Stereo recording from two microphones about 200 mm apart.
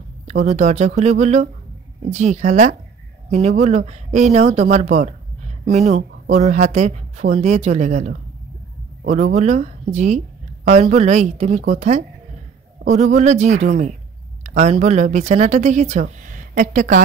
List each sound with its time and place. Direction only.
0.3 s speech: 35° right (ahead or behind)